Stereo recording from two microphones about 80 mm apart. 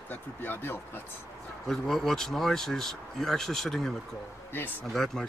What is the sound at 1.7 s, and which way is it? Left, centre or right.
Speech, centre.